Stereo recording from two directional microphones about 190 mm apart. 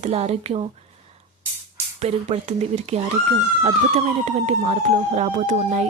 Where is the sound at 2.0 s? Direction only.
35° right (ahead or behind).